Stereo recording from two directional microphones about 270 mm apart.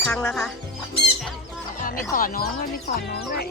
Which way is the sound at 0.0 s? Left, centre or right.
Centre.